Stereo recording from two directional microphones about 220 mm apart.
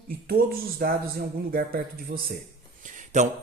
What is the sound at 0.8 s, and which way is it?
Speech, 40° right (ahead or behind).